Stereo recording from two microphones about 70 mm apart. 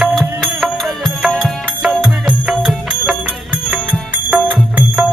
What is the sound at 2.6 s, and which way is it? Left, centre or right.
Music, centre.